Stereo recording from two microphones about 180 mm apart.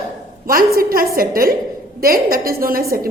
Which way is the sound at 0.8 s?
55° right (ahead or behind).